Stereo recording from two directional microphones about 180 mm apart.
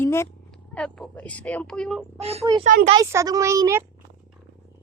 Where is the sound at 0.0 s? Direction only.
15° left (ahead or behind).